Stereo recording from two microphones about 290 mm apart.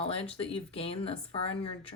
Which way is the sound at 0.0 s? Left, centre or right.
Centre.